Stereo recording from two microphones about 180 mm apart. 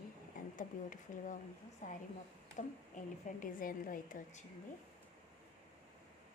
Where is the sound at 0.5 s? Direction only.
45° left (ahead or behind).